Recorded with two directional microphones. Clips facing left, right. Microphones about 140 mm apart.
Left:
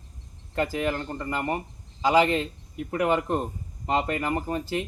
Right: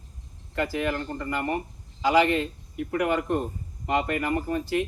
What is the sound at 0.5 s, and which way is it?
Speech, 30° left (ahead or behind).